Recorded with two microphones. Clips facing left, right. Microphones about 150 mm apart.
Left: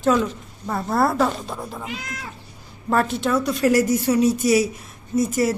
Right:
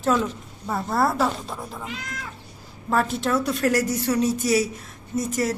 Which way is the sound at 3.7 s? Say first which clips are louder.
Left 6 dB; 10° left (ahead or behind).